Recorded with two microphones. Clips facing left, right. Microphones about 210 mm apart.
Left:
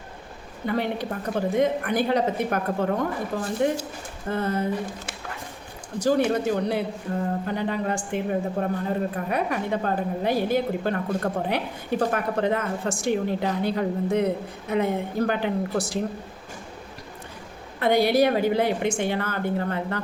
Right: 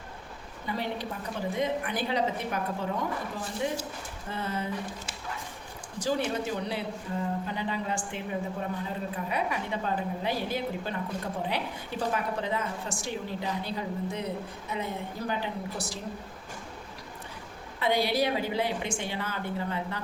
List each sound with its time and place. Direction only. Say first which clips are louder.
0.6 s a woman's voice: left 7 dB; 60° left (ahead or behind)
4.3 s a woman's voice: left 8 dB; 45° left (ahead or behind)
6.0 s a woman's voice: left 8 dB; 50° left (ahead or behind)
15.3 s a woman's voice: left 8 dB; 60° left (ahead or behind)
17.7 s a woman's voice: left 7 dB; 50° left (ahead or behind)